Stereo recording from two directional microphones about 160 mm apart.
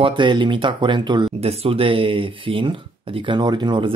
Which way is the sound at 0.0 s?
30° right (ahead or behind).